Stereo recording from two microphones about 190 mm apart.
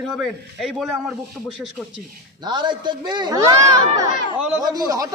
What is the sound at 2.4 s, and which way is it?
A man's voice, 25° right (ahead or behind).